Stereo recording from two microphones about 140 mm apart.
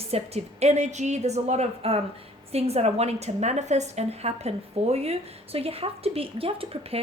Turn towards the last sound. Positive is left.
turn(degrees=-45)  # may be behind; listen again after turning